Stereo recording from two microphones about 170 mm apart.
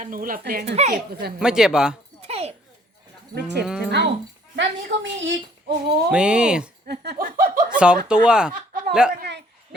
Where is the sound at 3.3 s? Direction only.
75° right (ahead or behind).